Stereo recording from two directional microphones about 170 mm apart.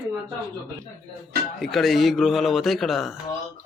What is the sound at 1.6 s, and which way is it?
Speech, centre (ahead or behind).